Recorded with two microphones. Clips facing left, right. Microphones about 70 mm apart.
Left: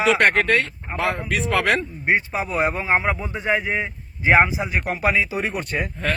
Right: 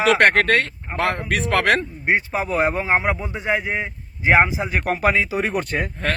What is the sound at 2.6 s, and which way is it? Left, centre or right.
Speech, right.